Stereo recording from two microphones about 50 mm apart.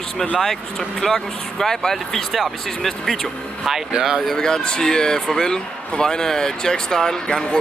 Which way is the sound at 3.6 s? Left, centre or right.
Centre.